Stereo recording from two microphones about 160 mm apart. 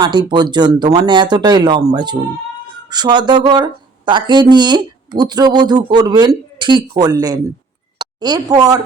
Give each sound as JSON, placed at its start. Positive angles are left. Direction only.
{"t": 0.0, "sound": "a woman's voice", "side_deg": -30}